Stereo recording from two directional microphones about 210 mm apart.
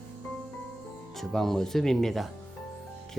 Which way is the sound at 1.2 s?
Centre (ahead or behind).